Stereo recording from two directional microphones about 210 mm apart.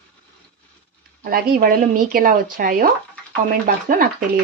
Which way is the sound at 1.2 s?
45° right (ahead or behind).